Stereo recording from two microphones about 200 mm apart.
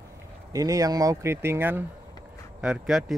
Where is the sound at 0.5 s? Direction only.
15° right (ahead or behind).